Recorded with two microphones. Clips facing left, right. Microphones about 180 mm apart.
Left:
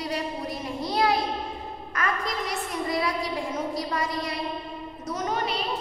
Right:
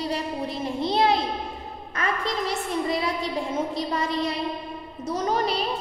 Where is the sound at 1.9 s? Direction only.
30° right (ahead or behind).